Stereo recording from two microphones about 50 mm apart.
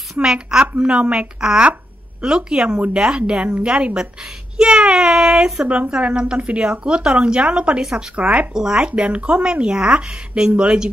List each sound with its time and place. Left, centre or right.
0.2 s speech: centre
8.2 s speech: right